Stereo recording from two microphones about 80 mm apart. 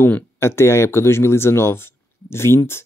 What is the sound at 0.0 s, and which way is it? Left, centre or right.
Speech, left.